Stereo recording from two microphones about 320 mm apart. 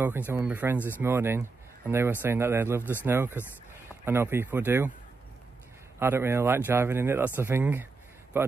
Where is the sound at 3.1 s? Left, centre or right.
Centre.